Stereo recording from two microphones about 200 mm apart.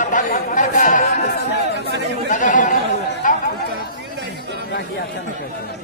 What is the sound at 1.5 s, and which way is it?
Chatter, 55° left (ahead or behind).